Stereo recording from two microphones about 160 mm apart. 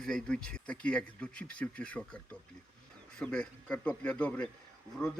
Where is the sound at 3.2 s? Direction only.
5° left (ahead or behind).